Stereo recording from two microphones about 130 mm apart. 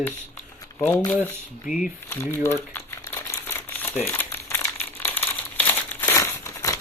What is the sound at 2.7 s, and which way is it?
Crumpling, 20° left (ahead or behind).